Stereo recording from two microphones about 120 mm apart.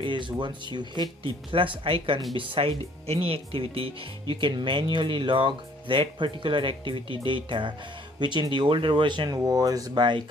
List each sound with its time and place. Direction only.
0.0 s speech: 40° right (ahead or behind)